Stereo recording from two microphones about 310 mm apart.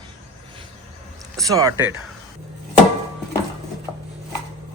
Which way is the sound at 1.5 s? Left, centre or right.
Centre.